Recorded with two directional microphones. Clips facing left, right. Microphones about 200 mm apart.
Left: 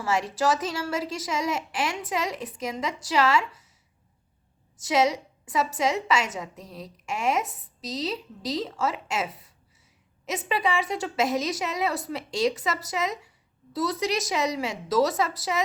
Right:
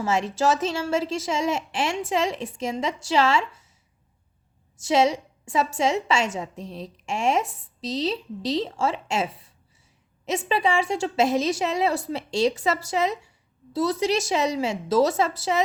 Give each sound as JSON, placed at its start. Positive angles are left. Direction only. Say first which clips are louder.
{"t": 0.0, "sound": "a woman's voice", "louder": "right 2 dB", "side_deg": -25}
{"t": 4.8, "sound": "a woman's voice", "louder": "right 3 dB", "side_deg": -25}